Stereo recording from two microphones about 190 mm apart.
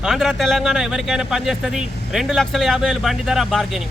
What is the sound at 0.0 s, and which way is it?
Speech, centre (ahead or behind).